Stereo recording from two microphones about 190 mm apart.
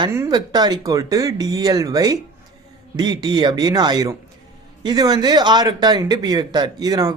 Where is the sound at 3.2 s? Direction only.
25° right (ahead or behind).